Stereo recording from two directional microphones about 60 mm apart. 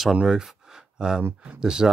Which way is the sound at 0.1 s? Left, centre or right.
Centre.